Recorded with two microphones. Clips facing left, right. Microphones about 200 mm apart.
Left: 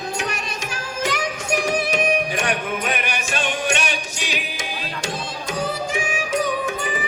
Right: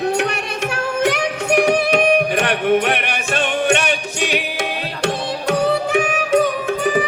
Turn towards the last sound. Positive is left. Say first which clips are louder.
# right 7 dB
turn(degrees=-65)  # may be behind; listen again after turning